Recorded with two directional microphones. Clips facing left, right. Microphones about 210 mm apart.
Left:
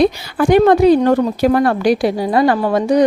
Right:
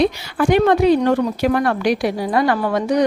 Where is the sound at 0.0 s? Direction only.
40° left (ahead or behind).